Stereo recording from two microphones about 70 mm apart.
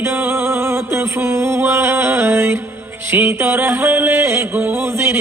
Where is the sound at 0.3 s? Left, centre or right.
Right.